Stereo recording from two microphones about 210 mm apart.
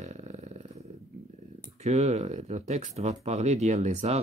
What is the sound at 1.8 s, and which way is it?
Speech, 30° right (ahead or behind).